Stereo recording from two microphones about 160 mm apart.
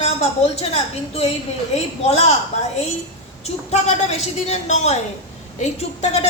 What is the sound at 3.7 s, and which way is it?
A woman's voice, 45° left (ahead or behind).